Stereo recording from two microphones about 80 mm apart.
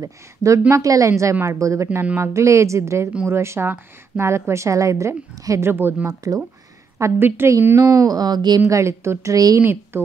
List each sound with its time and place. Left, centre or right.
0.0 s a woman's voice: right
5.7 s a woman's voice: right
6.0 s speech: right
7.0 s a woman's voice: right
7.6 s speech: right
8.6 s a woman's voice: right
9.6 s a woman's voice: right